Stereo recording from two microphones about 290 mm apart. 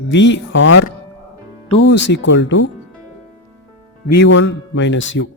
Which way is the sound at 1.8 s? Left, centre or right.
Left.